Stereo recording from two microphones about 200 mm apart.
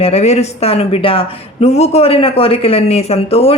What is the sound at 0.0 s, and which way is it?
Speech, 30° left (ahead or behind).